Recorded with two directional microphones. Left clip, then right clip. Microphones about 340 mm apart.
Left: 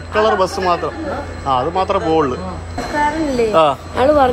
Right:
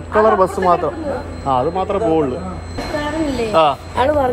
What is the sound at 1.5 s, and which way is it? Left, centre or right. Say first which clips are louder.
Speech: left 1 dB; centre.